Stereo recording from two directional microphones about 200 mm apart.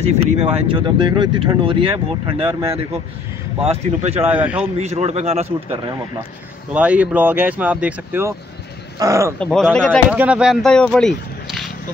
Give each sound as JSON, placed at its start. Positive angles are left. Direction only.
{"t": 0.0, "sound": "speech", "side_deg": -25}
{"t": 4.3, "sound": "speech", "side_deg": -5}
{"t": 4.7, "sound": "a man's voice", "side_deg": -30}
{"t": 5.7, "sound": "speech", "side_deg": -15}
{"t": 9.4, "sound": "speech", "side_deg": 5}
{"t": 10.1, "sound": "speech", "side_deg": -5}